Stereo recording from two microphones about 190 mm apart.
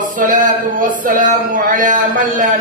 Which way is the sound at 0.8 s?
45° right (ahead or behind).